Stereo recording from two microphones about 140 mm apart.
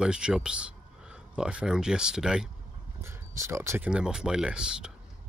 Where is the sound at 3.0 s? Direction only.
20° right (ahead or behind).